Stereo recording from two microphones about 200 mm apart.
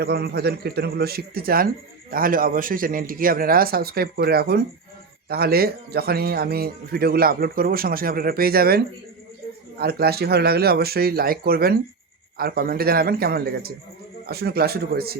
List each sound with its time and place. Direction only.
0.0 s speech: 55° right (ahead or behind)